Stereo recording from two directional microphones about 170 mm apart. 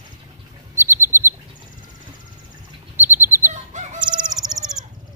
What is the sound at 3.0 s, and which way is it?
Bird, 15° right (ahead or behind).